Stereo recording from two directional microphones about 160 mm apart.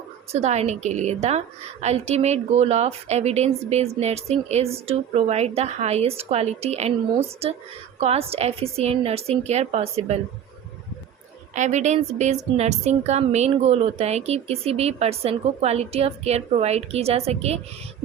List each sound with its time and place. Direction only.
0.3 s a woman's voice: 45° right (ahead or behind)
11.5 s a woman's voice: 50° right (ahead or behind)